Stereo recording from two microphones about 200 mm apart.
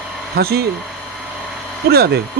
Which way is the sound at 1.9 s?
50° right (ahead or behind).